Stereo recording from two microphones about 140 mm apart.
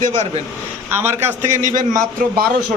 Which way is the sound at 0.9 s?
15° right (ahead or behind).